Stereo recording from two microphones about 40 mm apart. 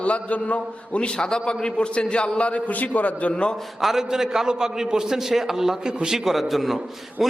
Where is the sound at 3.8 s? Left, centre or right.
Centre.